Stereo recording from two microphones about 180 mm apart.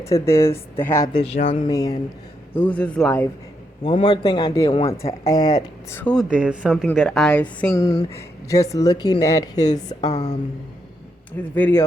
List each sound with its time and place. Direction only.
0.0 s speech: 15° left (ahead or behind)
1.2 s speech: 35° left (ahead or behind)
1.7 s a man's voice: 20° left (ahead or behind)
2.6 s speech: 10° left (ahead or behind)
3.8 s a man's voice: 25° left (ahead or behind); by 6.2 s 10° left (ahead or behind)
6.3 s speech: 5° right (ahead or behind); by 9.6 s 20° left (ahead or behind)
9.6 s speech: 40° left (ahead or behind)
11.5 s speech: 10° left (ahead or behind)